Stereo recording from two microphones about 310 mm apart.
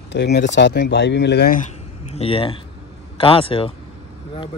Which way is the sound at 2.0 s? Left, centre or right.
Centre.